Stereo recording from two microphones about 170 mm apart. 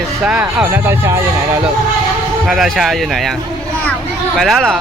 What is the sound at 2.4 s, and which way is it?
Speech, centre (ahead or behind).